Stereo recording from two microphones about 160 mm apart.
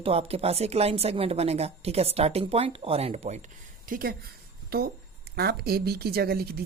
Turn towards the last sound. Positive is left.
turn(degrees=-75)  # may be behind; listen again after turning